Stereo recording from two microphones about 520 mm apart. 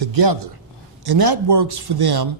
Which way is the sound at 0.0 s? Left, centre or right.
Right.